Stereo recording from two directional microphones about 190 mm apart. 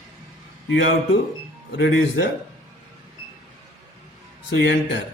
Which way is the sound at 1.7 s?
70° left (ahead or behind).